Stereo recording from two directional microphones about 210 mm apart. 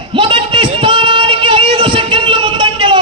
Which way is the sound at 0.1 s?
25° right (ahead or behind).